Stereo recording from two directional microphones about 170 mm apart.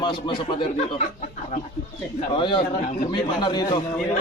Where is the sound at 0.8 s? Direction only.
45° left (ahead or behind).